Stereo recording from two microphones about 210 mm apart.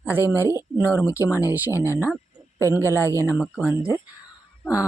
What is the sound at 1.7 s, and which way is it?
Speech, 15° left (ahead or behind).